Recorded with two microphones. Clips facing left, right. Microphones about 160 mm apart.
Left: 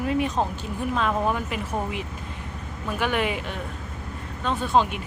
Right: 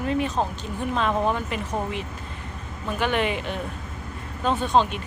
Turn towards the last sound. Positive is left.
turn(degrees=10)  # may be behind; listen again after turning